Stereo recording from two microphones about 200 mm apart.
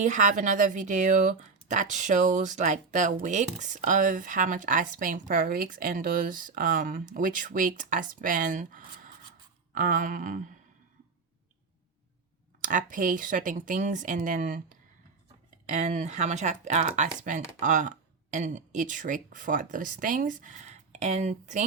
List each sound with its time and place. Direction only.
0.0 s speech: 40° right (ahead or behind)
12.6 s speech: 40° right (ahead or behind)